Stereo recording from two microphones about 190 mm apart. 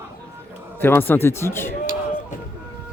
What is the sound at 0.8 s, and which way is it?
Speech, 10° left (ahead or behind).